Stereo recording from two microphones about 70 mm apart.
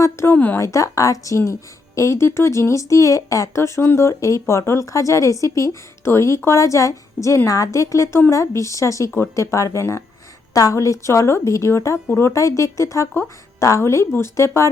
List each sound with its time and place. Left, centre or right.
0.0 s a sound: left
0.3 s speech: left
0.6 s speech: left
4.1 s speech: left